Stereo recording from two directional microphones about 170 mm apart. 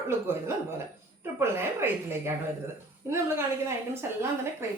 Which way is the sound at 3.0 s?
15° right (ahead or behind).